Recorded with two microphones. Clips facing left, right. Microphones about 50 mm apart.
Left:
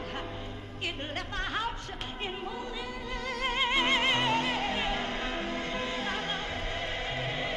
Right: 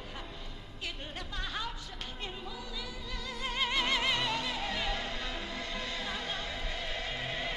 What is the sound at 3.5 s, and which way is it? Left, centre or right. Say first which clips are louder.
Music: left 3 dB; left.